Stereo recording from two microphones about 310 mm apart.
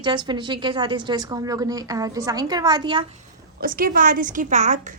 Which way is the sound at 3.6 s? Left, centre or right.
Right.